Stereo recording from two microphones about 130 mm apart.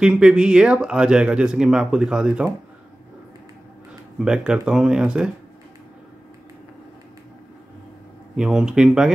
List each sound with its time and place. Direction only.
0.0 s speech: 5° right (ahead or behind)
4.2 s speech: 5° right (ahead or behind)
8.4 s speech: 5° right (ahead or behind)